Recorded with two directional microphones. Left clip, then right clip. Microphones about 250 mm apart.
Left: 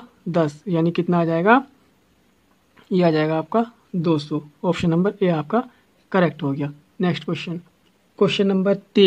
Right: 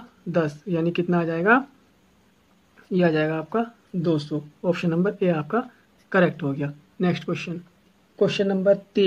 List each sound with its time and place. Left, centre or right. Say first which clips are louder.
0.3 s speech: left 3 dB; left
2.9 s speech: left 3 dB; left
8.2 s speech: left 3 dB; left